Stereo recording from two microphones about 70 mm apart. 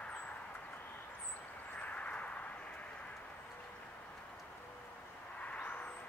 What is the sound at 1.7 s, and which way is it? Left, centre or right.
Vehicle, centre.